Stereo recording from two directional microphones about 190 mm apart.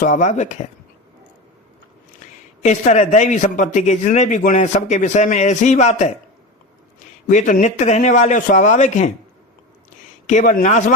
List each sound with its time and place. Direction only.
0.0 s a man's voice: 40° left (ahead or behind)
2.6 s a man's voice: 40° left (ahead or behind)
7.3 s a man's voice: 40° left (ahead or behind)
10.2 s a man's voice: 40° left (ahead or behind)